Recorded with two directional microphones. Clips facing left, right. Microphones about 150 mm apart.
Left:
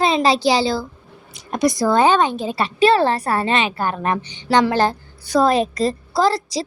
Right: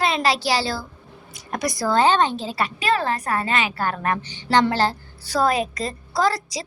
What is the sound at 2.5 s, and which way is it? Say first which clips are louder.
A woman's voice: left 9 dB; 30° left (ahead or behind).